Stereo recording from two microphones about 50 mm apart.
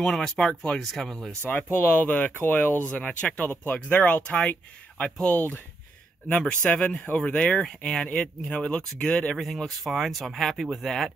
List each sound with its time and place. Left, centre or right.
0.0 s speech: centre
1.4 s speech: left
2.9 s speech: left
3.4 s speech: left
9.4 s speech: centre